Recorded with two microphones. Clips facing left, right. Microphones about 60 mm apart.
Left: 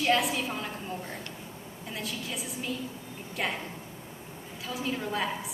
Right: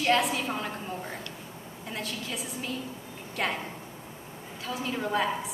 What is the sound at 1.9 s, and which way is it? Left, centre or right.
Speech, centre.